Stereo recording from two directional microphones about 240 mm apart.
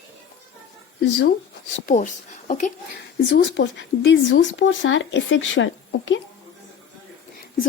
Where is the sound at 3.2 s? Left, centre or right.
Left.